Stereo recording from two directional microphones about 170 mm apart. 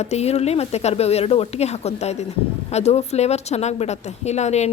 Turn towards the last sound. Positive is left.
turn(degrees=40)  # may be behind; listen again after turning